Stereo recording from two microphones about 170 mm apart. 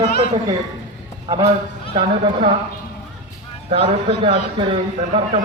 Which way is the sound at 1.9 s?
30° right (ahead or behind).